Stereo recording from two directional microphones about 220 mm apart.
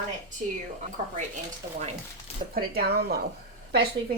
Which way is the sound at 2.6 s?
45° right (ahead or behind).